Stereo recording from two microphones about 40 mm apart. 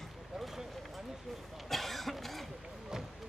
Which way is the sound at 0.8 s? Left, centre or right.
Centre.